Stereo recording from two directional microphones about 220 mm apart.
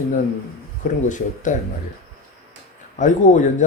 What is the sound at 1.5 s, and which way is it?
Speech, 35° left (ahead or behind).